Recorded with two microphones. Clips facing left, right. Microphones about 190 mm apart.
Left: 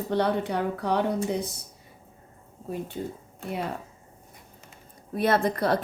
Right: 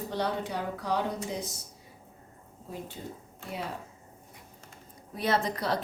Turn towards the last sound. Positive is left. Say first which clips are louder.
# left 5 dB
turn(degrees=55)  # may be behind; listen again after turning